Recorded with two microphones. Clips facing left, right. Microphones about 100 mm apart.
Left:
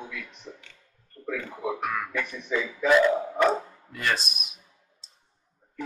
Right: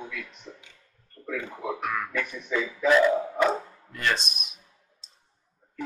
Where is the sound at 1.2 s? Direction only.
20° left (ahead or behind).